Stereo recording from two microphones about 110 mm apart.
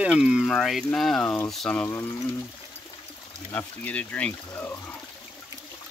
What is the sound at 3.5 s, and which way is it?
Speech, 15° left (ahead or behind).